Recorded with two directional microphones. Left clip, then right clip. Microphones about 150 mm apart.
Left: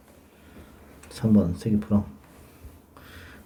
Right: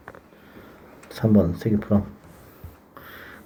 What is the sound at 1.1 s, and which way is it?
Speech, 10° right (ahead or behind).